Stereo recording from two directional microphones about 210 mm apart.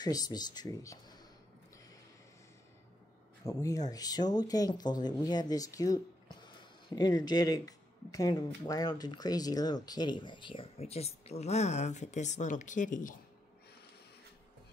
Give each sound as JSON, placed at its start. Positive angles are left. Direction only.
{"t": 0.0, "sound": "speech", "side_deg": 20}
{"t": 3.4, "sound": "speech", "side_deg": 15}